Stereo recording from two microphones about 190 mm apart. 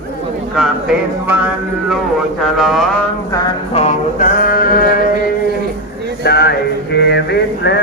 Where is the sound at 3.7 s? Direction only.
35° left (ahead or behind).